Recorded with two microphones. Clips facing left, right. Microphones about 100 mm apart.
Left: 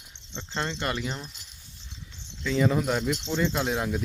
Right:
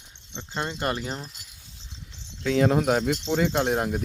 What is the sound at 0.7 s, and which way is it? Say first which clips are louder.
Speech: right 2 dB; 35° right (ahead or behind).